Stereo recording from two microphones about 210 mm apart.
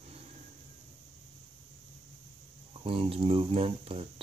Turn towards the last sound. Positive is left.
turn(degrees=-25)  # may be behind; listen again after turning